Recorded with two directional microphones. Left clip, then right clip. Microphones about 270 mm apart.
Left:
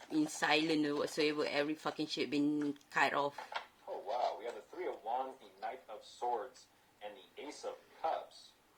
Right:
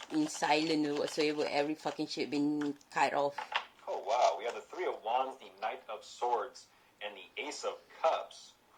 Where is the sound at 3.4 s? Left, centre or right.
Right.